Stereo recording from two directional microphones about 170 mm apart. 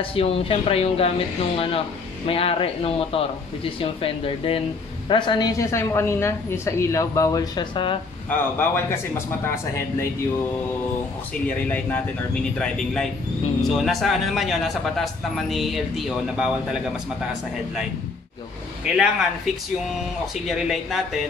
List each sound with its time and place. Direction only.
0.0 s speech: 35° left (ahead or behind)
2.2 s a man's voice: 35° left (ahead or behind)
8.3 s speech: 15° left (ahead or behind)
11.4 s a man's voice: 10° left (ahead or behind)
18.9 s a man's voice: 5° right (ahead or behind)